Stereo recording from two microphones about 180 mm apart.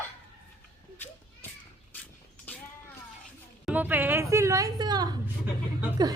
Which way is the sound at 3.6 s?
10° right (ahead or behind).